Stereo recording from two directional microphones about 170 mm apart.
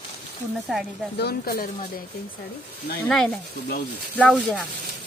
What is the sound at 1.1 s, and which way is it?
Speech, 65° left (ahead or behind).